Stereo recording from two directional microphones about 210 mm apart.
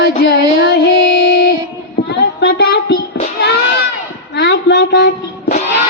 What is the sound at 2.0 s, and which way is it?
Child singing, 50° left (ahead or behind).